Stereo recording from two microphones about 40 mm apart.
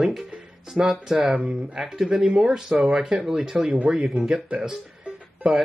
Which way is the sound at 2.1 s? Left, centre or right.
Centre.